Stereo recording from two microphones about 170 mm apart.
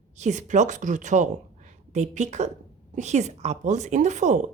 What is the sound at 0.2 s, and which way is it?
A woman's voice, 45° right (ahead or behind).